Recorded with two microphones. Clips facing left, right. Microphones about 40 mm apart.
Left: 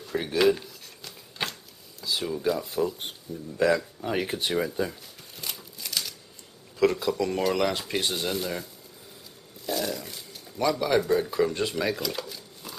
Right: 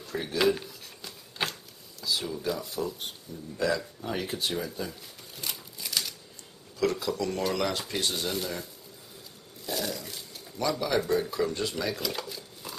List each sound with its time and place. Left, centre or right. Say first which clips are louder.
0.0 s speech: left 4 dB; centre
0.4 s a sound: left 3 dB; centre
2.0 s a sound: left 1 dB; left
2.2 s speech: left 5 dB; centre
3.5 s speech: left 5 dB; left
4.0 s speech: left 3 dB; left
5.0 s a sound: even; centre
6.8 s speech: left 4 dB; centre
9.7 s speech: left 3 dB; centre
12.0 s dishes: left 1 dB; centre